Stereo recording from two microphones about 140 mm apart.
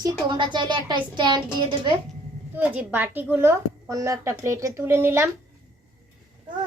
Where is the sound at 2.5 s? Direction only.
10° right (ahead or behind).